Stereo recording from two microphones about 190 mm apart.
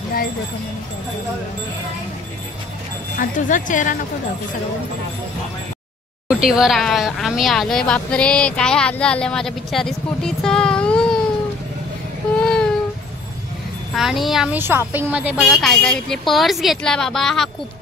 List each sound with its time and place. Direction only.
3.2 s speech: 45° left (ahead or behind)
6.2 s speech: 5° right (ahead or behind)
12.4 s a sound: 5° left (ahead or behind)
13.9 s speech: centre (ahead or behind)